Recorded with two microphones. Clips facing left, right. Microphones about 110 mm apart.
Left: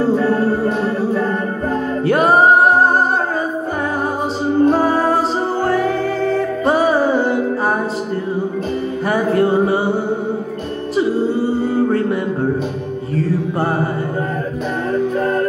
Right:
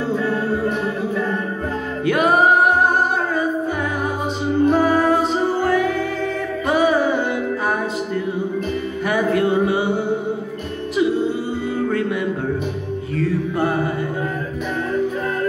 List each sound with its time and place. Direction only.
0.0 s music: 40° left (ahead or behind)
2.0 s singing: 35° left (ahead or behind)
4.6 s music: 35° left (ahead or behind)
9.1 s music: 35° left (ahead or behind)
11.9 s music: 35° left (ahead or behind)